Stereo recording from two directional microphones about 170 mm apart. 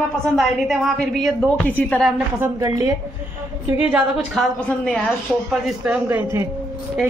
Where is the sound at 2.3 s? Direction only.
20° right (ahead or behind).